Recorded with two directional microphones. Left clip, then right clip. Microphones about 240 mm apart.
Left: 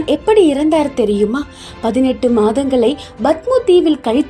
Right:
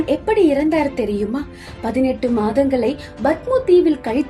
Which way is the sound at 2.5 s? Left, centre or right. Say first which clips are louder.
Left 3 dB; left.